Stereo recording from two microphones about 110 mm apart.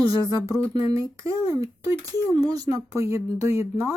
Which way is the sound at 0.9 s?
30° right (ahead or behind).